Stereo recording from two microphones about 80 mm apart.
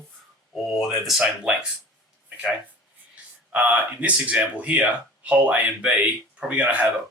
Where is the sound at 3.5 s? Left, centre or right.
Centre.